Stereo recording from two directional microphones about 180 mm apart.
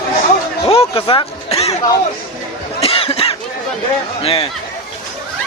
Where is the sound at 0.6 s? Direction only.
30° left (ahead or behind).